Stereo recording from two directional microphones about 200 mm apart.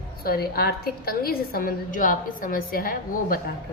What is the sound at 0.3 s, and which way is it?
A woman's voice, 50° left (ahead or behind).